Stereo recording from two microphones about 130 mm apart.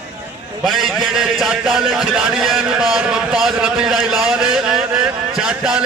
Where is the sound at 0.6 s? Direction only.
Centre (ahead or behind).